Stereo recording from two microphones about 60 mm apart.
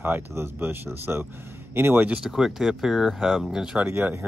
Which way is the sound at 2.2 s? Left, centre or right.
Centre.